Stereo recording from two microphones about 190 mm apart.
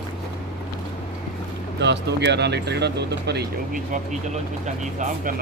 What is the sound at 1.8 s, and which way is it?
Speech, 65° right (ahead or behind).